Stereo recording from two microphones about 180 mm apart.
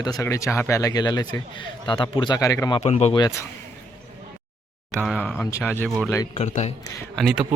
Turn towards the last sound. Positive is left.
turn(degrees=0)  # may be behind; listen again after turning